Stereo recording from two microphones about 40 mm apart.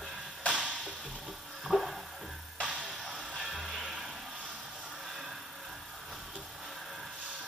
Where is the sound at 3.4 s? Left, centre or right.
Centre.